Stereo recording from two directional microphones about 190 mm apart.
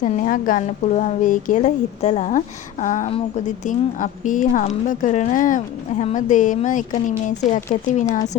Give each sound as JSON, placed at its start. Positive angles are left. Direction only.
{"t": 0.0, "sound": "a woman's voice", "side_deg": 40}